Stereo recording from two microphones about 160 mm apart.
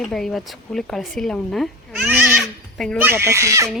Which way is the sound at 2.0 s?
10° right (ahead or behind).